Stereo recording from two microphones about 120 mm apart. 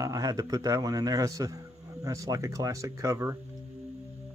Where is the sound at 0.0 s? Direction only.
30° right (ahead or behind).